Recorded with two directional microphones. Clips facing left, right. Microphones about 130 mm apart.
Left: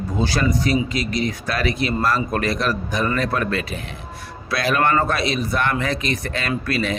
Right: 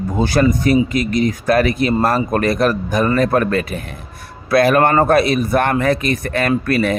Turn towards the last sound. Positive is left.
turn(degrees=-50)  # may be behind; listen again after turning